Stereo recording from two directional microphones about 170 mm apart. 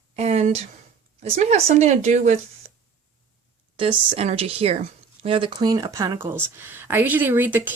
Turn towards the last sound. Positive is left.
turn(degrees=-10)  # may be behind; listen again after turning